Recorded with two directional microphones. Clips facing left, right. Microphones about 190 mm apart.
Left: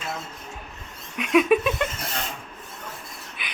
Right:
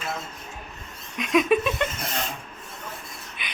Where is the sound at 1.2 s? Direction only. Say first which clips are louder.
Left 2 dB; 10° left (ahead or behind).